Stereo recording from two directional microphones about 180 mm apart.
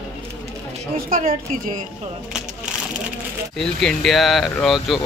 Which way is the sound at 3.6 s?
5° left (ahead or behind).